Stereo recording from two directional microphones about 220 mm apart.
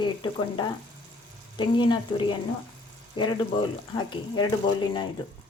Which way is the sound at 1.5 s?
20° left (ahead or behind).